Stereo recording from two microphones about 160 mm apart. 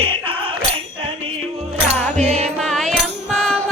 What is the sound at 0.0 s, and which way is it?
Music, 35° right (ahead or behind).